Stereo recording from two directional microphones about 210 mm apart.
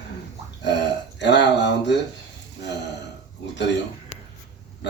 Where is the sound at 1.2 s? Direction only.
55° left (ahead or behind).